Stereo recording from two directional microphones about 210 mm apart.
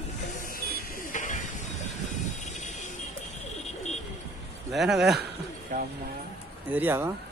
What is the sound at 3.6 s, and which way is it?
Pigeon, 35° left (ahead or behind).